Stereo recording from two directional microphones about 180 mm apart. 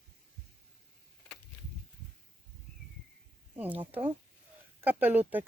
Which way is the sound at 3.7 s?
30° right (ahead or behind).